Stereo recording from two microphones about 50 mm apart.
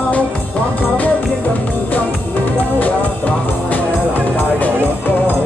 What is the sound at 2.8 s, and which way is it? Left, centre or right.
Music, left.